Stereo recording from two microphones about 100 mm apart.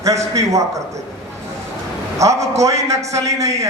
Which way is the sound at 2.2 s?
30° right (ahead or behind).